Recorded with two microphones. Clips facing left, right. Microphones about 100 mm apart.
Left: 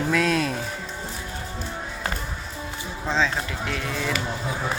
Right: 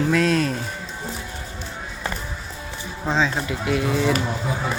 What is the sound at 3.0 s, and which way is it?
Speech, 5° right (ahead or behind).